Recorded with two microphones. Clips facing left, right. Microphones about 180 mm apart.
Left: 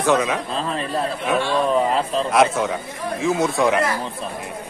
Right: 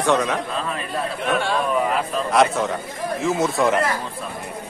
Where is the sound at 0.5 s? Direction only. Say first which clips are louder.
Left 2 dB; 30° left (ahead or behind).